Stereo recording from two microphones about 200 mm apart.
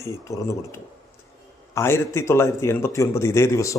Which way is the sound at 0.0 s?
15° left (ahead or behind).